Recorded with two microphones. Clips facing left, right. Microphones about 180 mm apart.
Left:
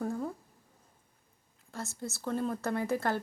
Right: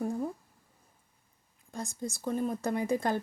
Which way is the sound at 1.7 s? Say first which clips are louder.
Right 2 dB; 15° right (ahead or behind).